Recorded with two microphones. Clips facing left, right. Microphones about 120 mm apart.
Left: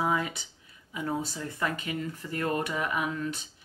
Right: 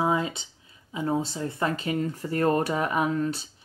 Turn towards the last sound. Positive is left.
turn(degrees=-35)  # may be behind; listen again after turning